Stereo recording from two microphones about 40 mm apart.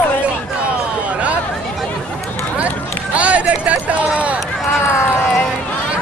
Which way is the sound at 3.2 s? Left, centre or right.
Right.